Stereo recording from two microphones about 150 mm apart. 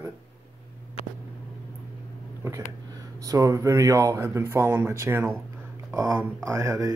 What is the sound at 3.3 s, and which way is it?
Speech, 20° right (ahead or behind).